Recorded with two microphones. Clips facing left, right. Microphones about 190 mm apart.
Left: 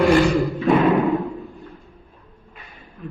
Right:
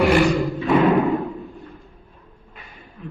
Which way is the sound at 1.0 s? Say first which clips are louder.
Left 1 dB; centre (ahead or behind).